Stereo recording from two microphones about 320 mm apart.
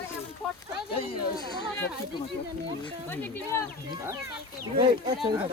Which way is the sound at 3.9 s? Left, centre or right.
Centre.